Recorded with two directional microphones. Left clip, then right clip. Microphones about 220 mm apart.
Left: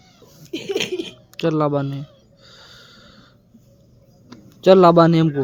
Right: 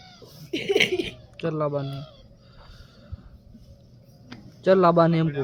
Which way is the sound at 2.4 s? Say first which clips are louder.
Left 8 dB; 45° left (ahead or behind).